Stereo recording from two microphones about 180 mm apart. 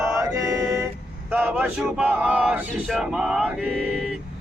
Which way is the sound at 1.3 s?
10° right (ahead or behind).